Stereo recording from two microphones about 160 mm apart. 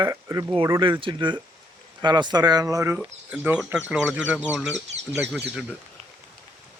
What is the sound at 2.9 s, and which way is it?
Speech, 10° right (ahead or behind).